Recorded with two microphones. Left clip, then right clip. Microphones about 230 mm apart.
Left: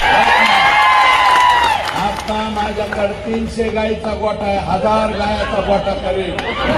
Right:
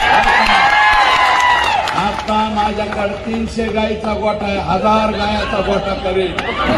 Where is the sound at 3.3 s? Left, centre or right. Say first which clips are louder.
Left 1 dB; right.